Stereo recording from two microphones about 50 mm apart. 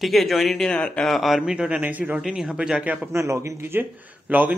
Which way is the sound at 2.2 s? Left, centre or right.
Centre.